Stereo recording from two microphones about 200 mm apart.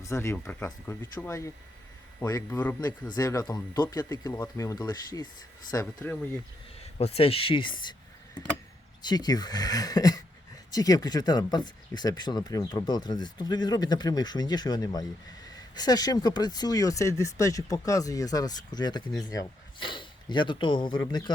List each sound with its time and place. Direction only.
0.0 s speech: 15° left (ahead or behind)
7.0 s speech: 30° left (ahead or behind)
9.0 s a man's voice: 20° left (ahead or behind)